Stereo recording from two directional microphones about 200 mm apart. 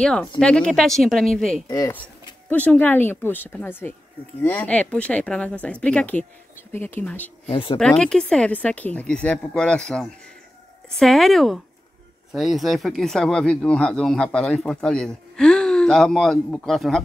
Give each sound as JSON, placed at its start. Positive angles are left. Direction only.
{"t": 0.0, "sound": "speech", "side_deg": 5}
{"t": 1.7, "sound": "speech", "side_deg": 15}
{"t": 7.4, "sound": "speech", "side_deg": 25}
{"t": 7.8, "sound": "speech", "side_deg": 5}